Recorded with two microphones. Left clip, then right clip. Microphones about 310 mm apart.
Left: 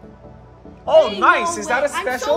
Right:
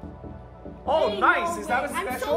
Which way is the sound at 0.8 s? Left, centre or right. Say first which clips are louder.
Left 8 dB; centre.